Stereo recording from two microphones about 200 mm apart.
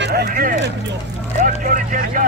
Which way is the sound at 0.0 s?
55° right (ahead or behind).